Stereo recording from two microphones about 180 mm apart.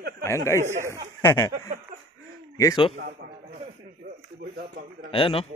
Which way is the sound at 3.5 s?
40° right (ahead or behind).